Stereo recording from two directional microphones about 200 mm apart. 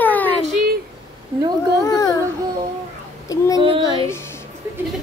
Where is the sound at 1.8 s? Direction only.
20° left (ahead or behind).